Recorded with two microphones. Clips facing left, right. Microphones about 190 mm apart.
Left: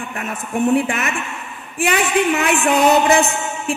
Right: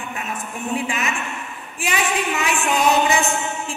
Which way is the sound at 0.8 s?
60° left (ahead or behind).